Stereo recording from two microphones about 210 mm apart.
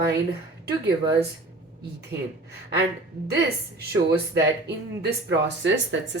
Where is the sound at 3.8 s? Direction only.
50° right (ahead or behind).